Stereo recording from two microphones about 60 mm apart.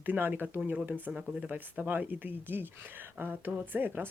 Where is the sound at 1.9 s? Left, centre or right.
Right.